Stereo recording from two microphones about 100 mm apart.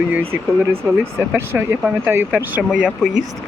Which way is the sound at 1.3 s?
25° right (ahead or behind).